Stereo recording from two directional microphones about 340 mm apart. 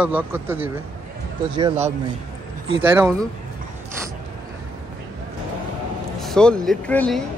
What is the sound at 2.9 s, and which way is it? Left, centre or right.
Speech, centre.